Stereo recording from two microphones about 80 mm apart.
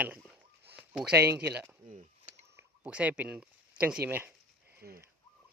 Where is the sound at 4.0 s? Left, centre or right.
Right.